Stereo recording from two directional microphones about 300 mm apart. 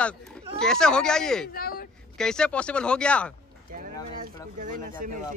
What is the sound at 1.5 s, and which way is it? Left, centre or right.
Speech, left.